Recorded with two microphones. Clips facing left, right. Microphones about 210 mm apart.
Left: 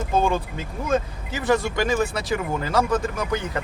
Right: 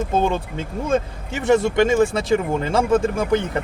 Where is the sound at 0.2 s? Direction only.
25° right (ahead or behind).